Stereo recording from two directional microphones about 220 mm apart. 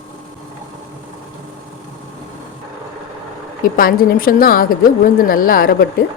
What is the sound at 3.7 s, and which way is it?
A woman's voice, 40° left (ahead or behind).